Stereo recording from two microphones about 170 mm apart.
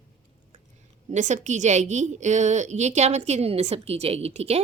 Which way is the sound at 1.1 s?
45° right (ahead or behind).